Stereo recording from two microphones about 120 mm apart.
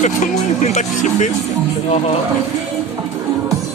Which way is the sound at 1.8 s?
60° left (ahead or behind).